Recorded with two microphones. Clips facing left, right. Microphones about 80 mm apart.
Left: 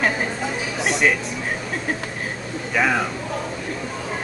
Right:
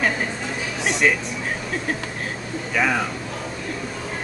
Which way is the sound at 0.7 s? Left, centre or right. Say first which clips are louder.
Even; centre.